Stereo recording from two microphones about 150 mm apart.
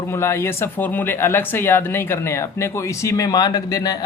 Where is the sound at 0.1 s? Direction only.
15° left (ahead or behind).